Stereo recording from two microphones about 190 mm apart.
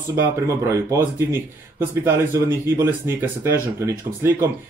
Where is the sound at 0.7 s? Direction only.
15° right (ahead or behind).